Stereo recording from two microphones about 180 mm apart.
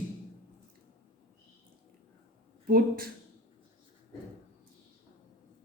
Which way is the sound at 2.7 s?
55° right (ahead or behind).